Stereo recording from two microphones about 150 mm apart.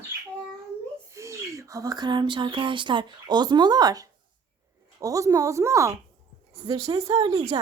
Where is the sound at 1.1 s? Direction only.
20° right (ahead or behind).